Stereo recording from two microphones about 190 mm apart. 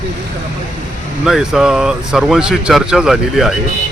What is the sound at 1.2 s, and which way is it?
Speech, centre (ahead or behind).